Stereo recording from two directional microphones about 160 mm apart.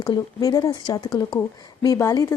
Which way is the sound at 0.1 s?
25° left (ahead or behind).